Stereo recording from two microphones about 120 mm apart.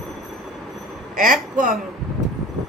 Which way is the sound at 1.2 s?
90° right.